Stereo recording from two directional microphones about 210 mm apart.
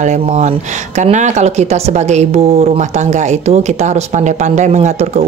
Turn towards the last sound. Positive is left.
turn(degrees=-35)  # may be behind; listen again after turning